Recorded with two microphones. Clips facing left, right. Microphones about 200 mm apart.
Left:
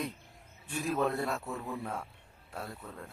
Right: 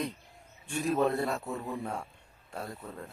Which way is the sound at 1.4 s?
15° right (ahead or behind).